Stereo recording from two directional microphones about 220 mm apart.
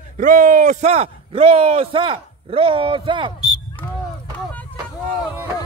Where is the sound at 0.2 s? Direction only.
35° right (ahead or behind).